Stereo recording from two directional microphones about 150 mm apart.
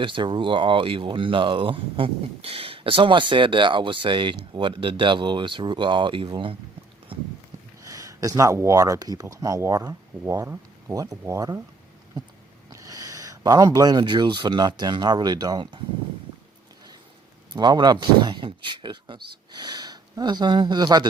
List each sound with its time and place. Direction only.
0.0 s speech: 35° right (ahead or behind)
7.1 s a sound: 35° right (ahead or behind)
7.8 s speech: 20° right (ahead or behind)
12.7 s speech: 20° right (ahead or behind)
17.5 s speech: 30° right (ahead or behind)